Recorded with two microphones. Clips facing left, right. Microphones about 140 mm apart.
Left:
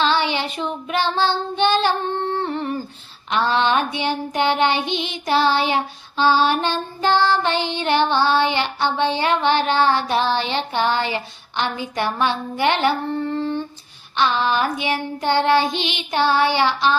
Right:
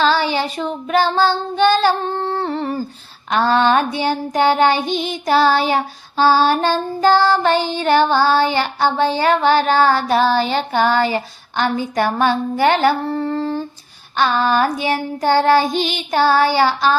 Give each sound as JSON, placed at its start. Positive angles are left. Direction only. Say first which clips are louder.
{"t": 0.0, "sound": "child singing", "louder": "right 3 dB", "side_deg": -40}